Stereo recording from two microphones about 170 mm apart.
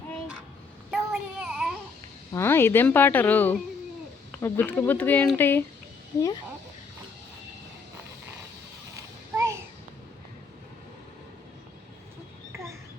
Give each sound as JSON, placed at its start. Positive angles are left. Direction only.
{"t": 0.9, "sound": "child singing", "side_deg": -5}
{"t": 2.3, "sound": "a woman's voice", "side_deg": 15}
{"t": 9.0, "sound": "a sound", "side_deg": -20}